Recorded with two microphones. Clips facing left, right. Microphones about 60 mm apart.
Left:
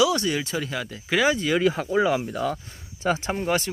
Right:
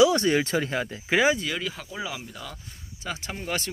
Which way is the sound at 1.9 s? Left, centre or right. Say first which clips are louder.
Left 13 dB; left.